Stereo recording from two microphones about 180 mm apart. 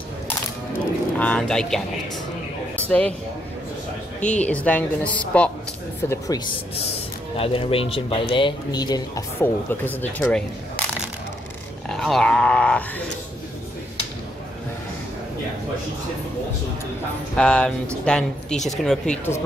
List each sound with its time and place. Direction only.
1.1 s speech: 5° left (ahead or behind)
2.8 s a woman's voice: 5° left (ahead or behind)
4.4 s a woman's voice: 10° left (ahead or behind)
6.0 s speech: 20° left (ahead or behind)
7.3 s speech: 30° left (ahead or behind); by 10.4 s 10° left (ahead or behind)
11.9 s speech: centre (ahead or behind)
17.4 s speech: 5° left (ahead or behind)